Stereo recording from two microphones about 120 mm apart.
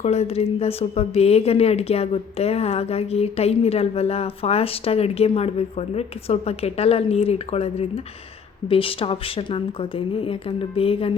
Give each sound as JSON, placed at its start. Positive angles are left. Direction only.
{"t": 0.0, "sound": "a woman's voice", "side_deg": 65}